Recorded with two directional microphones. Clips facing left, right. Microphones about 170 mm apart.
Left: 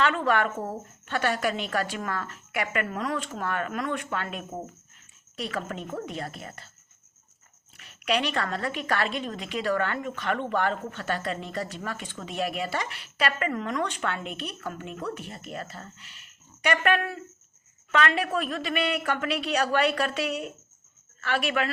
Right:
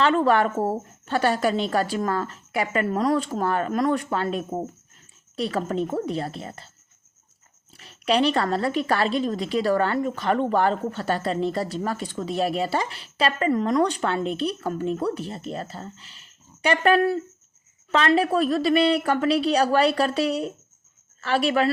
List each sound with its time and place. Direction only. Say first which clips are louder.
0.0 s a woman's voice: right 5 dB; 35° right (ahead or behind)
7.8 s a woman's voice: right 6 dB; 30° right (ahead or behind)